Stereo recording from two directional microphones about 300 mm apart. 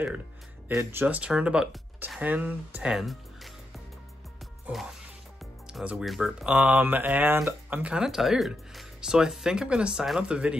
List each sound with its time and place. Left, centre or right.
0.7 s speech: centre
4.6 s speech: centre